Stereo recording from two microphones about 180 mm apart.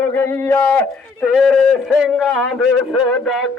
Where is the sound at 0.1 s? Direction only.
10° left (ahead or behind).